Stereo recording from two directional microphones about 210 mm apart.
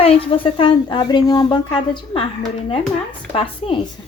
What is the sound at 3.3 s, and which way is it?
Speech, 25° left (ahead or behind).